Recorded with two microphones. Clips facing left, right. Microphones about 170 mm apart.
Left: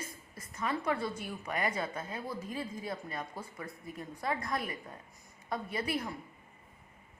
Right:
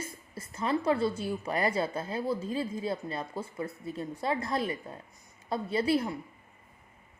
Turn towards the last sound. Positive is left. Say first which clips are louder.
# right 8 dB
turn(degrees=-30)  # may be behind; listen again after turning